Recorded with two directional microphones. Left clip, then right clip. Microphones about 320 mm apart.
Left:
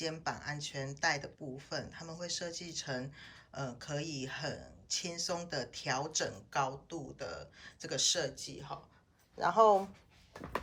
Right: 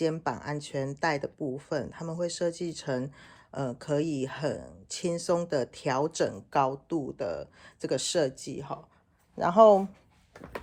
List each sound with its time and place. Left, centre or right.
0.0 s speech: centre